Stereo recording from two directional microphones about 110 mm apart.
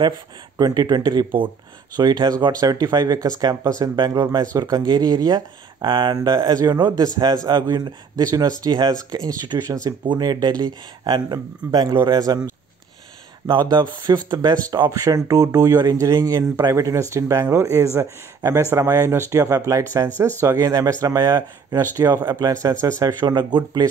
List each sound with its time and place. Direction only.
0.0 s speech: 40° right (ahead or behind)
13.5 s speech: 45° right (ahead or behind)